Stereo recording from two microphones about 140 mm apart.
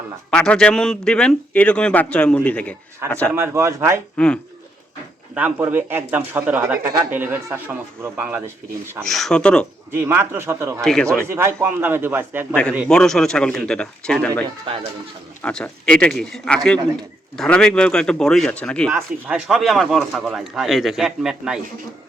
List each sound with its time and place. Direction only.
0.3 s a man's voice: 5° left (ahead or behind)
3.3 s a man's voice: 20° right (ahead or behind)
5.3 s a man's voice: 15° right (ahead or behind)
6.8 s speech: 25° right (ahead or behind)
7.1 s a man's voice: 15° right (ahead or behind)
9.0 s a man's voice: 5° left (ahead or behind)
9.9 s a man's voice: 15° right (ahead or behind)
10.8 s a man's voice: 5° left (ahead or behind)
11.2 s a man's voice: 20° right (ahead or behind)
12.9 s a man's voice: 5° left (ahead or behind)
18.9 s a man's voice: 15° right (ahead or behind)
19.5 s a man's voice: centre (ahead or behind)